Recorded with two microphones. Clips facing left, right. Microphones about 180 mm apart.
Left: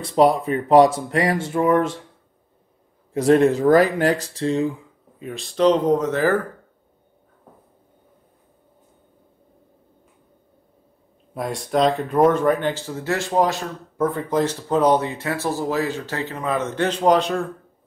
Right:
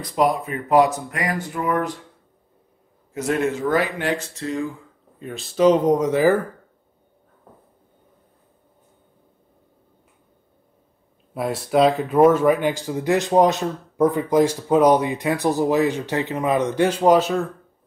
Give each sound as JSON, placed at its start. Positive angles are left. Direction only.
{"t": 0.0, "sound": "speech", "side_deg": 30}
{"t": 3.1, "sound": "speech", "side_deg": 35}
{"t": 5.2, "sound": "speech", "side_deg": 0}
{"t": 11.3, "sound": "speech", "side_deg": -5}